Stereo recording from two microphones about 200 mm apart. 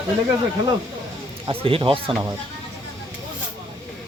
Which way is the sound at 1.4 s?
25° right (ahead or behind).